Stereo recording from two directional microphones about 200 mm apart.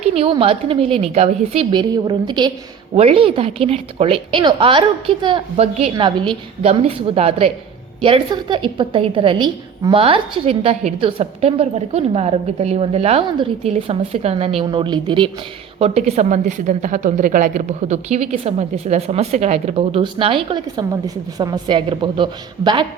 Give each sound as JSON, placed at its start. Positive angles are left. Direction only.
{"t": 0.0, "sound": "a woman's voice", "side_deg": -30}